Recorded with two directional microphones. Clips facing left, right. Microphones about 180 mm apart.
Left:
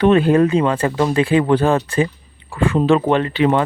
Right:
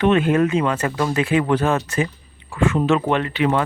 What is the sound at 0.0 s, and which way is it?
Speech, 35° left (ahead or behind).